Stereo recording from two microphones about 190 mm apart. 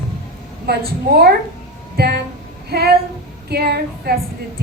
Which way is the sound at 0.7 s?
55° right (ahead or behind).